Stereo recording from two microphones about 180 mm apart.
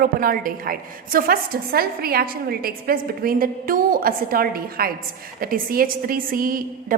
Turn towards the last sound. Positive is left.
turn(degrees=-50)  # may be behind; listen again after turning